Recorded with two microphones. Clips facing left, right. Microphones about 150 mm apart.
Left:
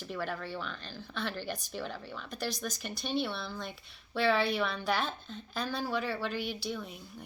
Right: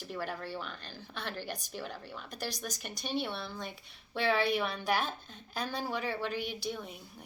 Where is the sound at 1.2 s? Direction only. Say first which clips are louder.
Left 3 dB; 45° right (ahead or behind).